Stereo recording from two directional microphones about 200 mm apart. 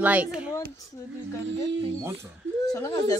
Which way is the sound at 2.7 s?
15° left (ahead or behind).